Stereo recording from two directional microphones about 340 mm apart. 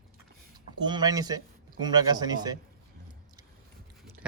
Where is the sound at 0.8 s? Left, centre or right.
Centre.